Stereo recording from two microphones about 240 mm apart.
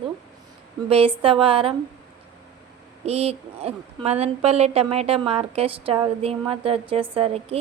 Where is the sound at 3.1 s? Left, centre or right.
Right.